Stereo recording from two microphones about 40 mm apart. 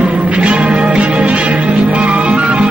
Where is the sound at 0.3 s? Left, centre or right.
Right.